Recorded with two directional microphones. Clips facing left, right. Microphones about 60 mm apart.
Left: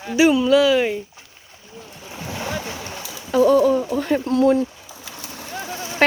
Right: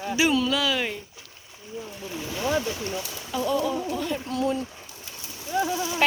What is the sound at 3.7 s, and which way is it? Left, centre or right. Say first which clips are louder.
Speech: left 8 dB; left.